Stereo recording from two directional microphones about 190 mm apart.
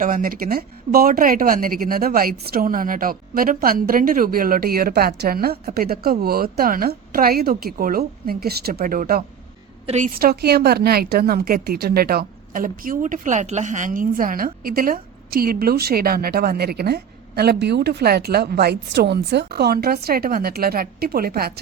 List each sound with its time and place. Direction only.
0.0 s a woman's voice: 45° right (ahead or behind)
9.8 s a woman's voice: 40° right (ahead or behind); by 21.6 s 55° right (ahead or behind)